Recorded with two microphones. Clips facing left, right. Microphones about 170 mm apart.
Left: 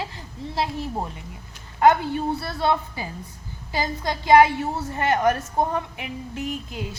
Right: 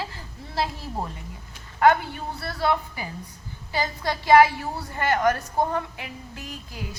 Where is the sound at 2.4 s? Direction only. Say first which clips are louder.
Left 2 dB; 25° left (ahead or behind).